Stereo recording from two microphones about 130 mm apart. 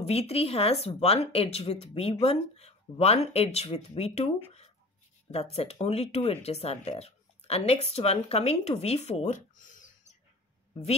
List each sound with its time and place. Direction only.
0.0 s speech: 50° left (ahead or behind); by 10.1 s 80° left